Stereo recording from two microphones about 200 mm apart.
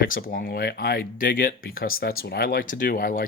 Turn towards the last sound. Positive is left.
turn(degrees=45)  # may be behind; listen again after turning